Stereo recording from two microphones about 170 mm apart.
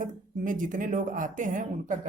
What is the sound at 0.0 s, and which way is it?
Speech, 50° right (ahead or behind).